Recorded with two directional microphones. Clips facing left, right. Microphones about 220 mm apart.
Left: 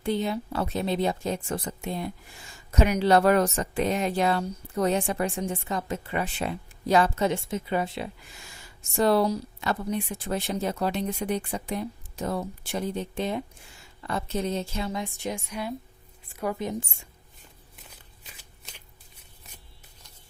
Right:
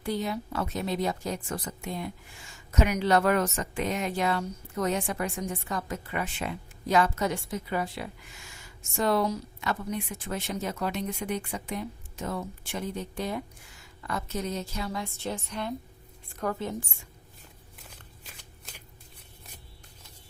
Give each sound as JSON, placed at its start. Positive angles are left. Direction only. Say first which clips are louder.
{"t": 0.0, "sound": "speech", "louder": "left 3 dB", "side_deg": 25}
{"t": 17.7, "sound": "shuffling cards", "louder": "right 2 dB", "side_deg": 0}